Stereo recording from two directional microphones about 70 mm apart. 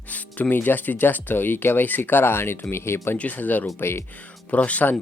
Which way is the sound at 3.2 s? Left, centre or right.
Left.